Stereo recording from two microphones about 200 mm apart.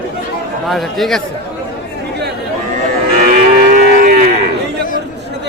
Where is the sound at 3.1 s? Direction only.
45° right (ahead or behind).